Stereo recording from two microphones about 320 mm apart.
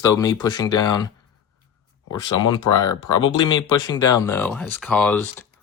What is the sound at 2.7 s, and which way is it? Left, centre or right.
Speech, left.